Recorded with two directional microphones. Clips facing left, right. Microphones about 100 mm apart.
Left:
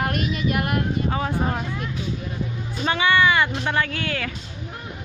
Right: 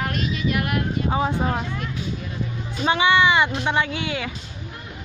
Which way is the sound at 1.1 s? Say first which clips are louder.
Right 2 dB; 15° right (ahead or behind).